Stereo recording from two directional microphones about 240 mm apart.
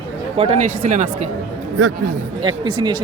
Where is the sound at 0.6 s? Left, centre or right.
Right.